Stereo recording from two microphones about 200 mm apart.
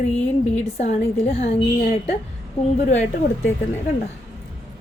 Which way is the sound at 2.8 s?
35° left (ahead or behind).